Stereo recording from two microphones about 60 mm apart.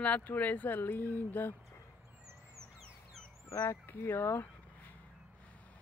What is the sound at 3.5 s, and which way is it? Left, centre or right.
Speech, left.